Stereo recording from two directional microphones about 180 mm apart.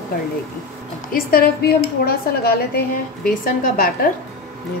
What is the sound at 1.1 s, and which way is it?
A woman's voice, 55° left (ahead or behind).